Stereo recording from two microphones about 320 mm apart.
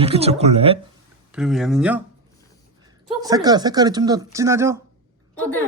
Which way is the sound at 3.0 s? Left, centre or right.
Centre.